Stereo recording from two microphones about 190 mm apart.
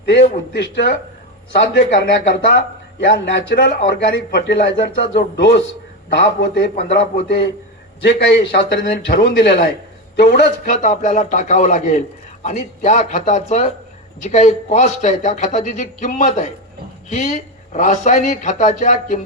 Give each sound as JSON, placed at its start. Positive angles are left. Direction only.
{"t": 0.0, "sound": "speech", "side_deg": 65}
{"t": 8.0, "sound": "speech", "side_deg": 65}
{"t": 10.7, "sound": "a man's voice", "side_deg": 40}